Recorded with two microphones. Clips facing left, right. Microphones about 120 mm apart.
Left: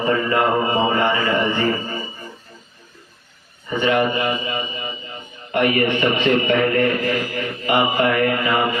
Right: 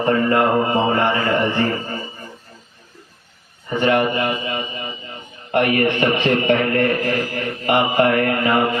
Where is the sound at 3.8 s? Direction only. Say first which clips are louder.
Right 1 dB; 50° right (ahead or behind).